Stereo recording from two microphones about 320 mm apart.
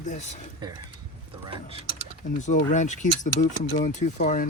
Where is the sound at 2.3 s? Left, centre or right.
Left.